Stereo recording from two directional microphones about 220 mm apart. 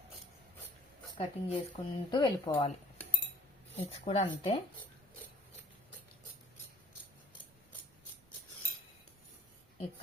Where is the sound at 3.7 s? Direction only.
25° left (ahead or behind).